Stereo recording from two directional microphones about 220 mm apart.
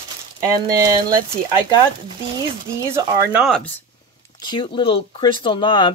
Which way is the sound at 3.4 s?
5° left (ahead or behind).